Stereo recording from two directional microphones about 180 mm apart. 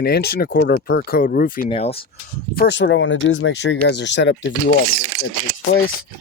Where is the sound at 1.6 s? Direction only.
30° left (ahead or behind).